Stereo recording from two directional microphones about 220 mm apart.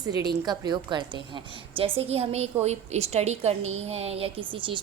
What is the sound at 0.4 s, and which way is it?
A woman's voice, 20° right (ahead or behind).